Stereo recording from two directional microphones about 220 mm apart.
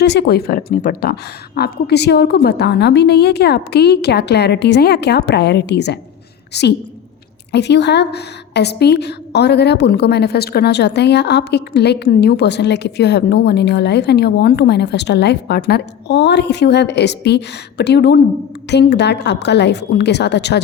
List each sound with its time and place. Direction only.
0.0 s a woman's voice: 50° left (ahead or behind)